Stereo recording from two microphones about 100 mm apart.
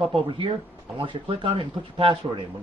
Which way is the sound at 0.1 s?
60° right (ahead or behind).